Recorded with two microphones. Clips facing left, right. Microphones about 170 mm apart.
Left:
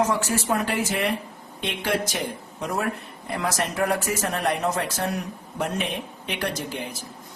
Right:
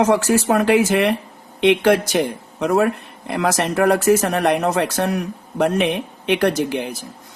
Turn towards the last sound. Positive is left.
turn(degrees=-70)  # may be behind; listen again after turning